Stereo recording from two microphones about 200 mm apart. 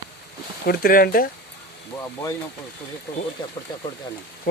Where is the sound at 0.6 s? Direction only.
50° left (ahead or behind).